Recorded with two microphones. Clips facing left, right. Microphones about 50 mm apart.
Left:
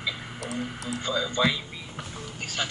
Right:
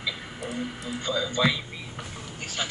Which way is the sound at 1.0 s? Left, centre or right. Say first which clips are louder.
Even; centre.